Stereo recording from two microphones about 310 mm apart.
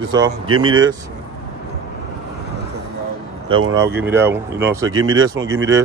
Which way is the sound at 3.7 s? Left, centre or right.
Centre.